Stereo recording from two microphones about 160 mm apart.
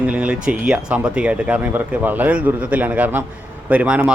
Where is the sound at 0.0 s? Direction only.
5° right (ahead or behind).